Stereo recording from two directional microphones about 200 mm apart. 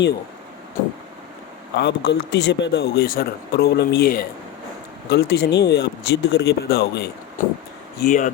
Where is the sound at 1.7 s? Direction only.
60° left (ahead or behind).